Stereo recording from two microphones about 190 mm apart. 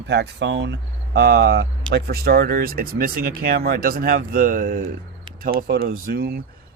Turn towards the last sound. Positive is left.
turn(degrees=-50)  # may be behind; listen again after turning